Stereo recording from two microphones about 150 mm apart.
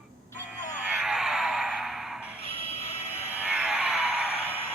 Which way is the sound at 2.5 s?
40° left (ahead or behind).